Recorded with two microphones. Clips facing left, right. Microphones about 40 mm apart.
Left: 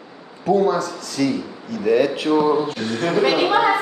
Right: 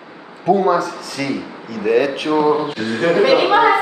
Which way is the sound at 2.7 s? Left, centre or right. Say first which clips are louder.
Right 4 dB; centre.